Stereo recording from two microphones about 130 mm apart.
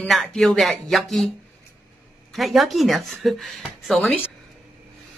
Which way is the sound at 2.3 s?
Centre (ahead or behind).